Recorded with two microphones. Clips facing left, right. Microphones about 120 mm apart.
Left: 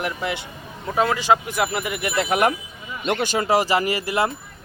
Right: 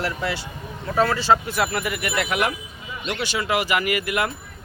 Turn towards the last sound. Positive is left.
turn(degrees=30)  # may be behind; listen again after turning